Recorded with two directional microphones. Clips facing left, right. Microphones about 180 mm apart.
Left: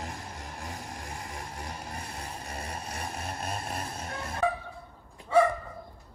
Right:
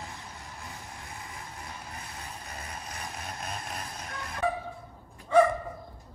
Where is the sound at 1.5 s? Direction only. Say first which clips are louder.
Left 4 dB; 40° left (ahead or behind).